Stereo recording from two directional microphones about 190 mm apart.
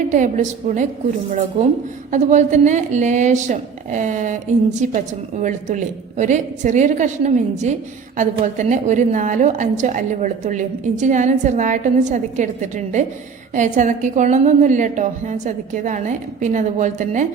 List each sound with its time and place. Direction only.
0.1 s a woman's voice: 40° right (ahead or behind)